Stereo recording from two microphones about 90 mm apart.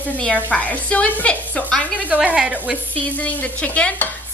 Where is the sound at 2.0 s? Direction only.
15° right (ahead or behind).